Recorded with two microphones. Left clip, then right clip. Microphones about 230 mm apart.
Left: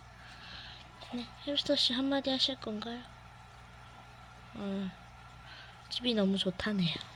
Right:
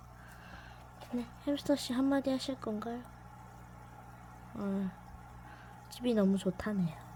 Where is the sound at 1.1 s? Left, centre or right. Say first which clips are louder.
Left 2 dB; centre.